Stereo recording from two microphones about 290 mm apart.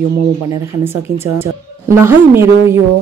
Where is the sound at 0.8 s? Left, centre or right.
Centre.